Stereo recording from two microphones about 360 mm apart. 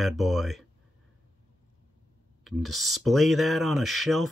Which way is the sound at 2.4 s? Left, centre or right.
Centre.